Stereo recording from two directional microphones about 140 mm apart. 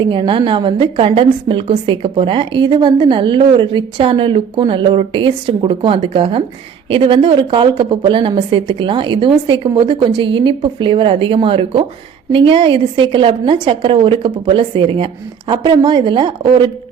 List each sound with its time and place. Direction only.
0.0 s a woman's voice: 35° right (ahead or behind)